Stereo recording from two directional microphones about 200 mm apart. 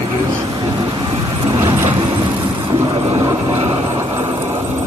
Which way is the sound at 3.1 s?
15° right (ahead or behind).